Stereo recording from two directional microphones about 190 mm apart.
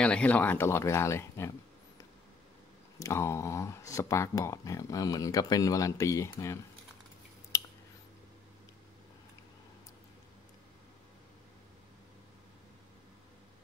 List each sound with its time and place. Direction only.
0.0 s speech: 5° left (ahead or behind)
3.0 s speech: 15° left (ahead or behind)
7.5 s a sound: 15° left (ahead or behind)